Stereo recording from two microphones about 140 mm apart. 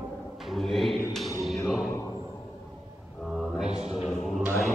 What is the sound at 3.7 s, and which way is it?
Music, 45° right (ahead or behind).